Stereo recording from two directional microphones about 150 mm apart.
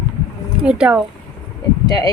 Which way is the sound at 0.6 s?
5° right (ahead or behind).